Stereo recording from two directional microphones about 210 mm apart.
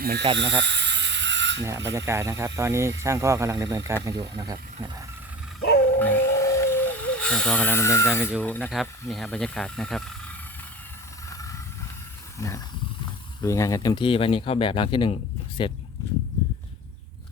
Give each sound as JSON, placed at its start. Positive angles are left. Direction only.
{"t": 0.0, "sound": "speech", "side_deg": -50}
{"t": 0.3, "sound": "a sound", "side_deg": -55}
{"t": 1.9, "sound": "speech", "side_deg": -15}
{"t": 6.0, "sound": "a sound", "side_deg": 10}
{"t": 8.4, "sound": "speech", "side_deg": 5}
{"t": 11.3, "sound": "hiss", "side_deg": 15}
{"t": 12.4, "sound": "roaring cats", "side_deg": 15}
{"t": 13.4, "sound": "speech", "side_deg": 15}